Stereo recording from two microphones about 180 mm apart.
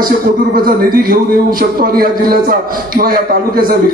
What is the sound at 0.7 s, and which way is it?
A man's voice, 55° right (ahead or behind).